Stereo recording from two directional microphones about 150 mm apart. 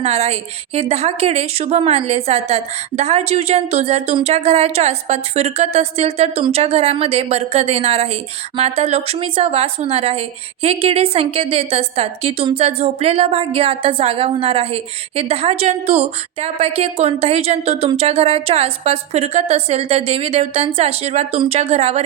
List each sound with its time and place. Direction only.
0.0 s a woman's voice: 45° right (ahead or behind)